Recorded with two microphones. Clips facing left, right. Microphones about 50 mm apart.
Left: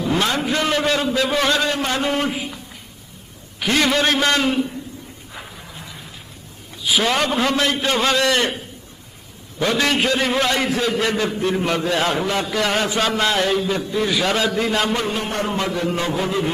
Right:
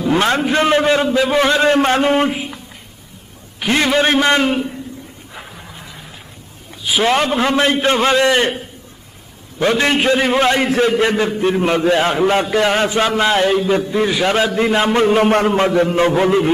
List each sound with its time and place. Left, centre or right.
0.1 s a man's voice: right
2.0 s a man's voice: right
3.6 s a man's voice: right
6.8 s a man's voice: right
9.6 s a man's voice: right
13.7 s a man's voice: right
15.1 s a man's voice: right
15.5 s a man's voice: right